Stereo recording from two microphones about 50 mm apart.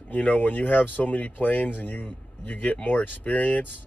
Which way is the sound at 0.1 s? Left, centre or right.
Left.